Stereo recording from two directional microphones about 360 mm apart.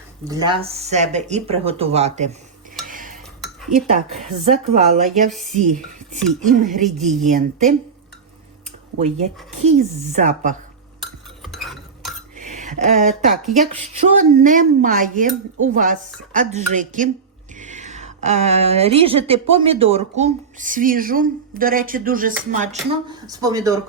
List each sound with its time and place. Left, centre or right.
0.3 s speech: centre
2.8 s cutlery: right
3.4 s dishes: centre
4.4 s a woman's voice: centre
9.0 s a woman's voice: centre
11.4 s stir: centre
12.4 s a sound: centre
13.6 s a woman's voice: centre
23.0 s speech: centre